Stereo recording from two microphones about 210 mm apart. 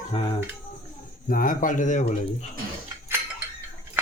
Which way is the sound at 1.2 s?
40° left (ahead or behind).